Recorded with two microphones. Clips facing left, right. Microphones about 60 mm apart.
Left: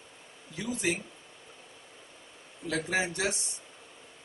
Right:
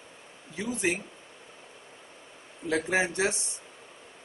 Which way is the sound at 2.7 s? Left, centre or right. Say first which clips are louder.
Right 4 dB; right.